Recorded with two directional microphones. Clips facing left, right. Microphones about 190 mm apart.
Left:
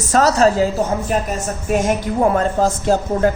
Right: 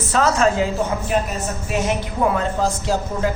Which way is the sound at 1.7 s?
45° left (ahead or behind).